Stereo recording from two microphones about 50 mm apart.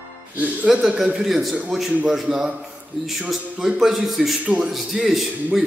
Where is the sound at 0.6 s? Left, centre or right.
Centre.